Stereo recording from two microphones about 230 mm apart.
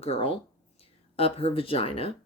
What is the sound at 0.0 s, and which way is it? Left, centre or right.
Speech, left.